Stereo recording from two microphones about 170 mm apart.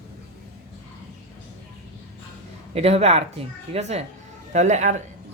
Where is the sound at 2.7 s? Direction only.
35° right (ahead or behind).